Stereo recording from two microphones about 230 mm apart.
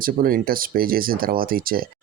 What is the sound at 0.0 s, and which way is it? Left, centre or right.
Speech, right.